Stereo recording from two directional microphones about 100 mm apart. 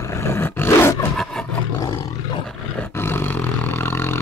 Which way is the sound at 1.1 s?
5° left (ahead or behind).